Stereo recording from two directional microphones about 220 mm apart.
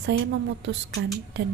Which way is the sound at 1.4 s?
55° right (ahead or behind).